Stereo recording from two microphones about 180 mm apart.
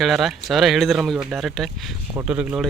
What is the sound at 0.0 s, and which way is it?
Speech, centre (ahead or behind).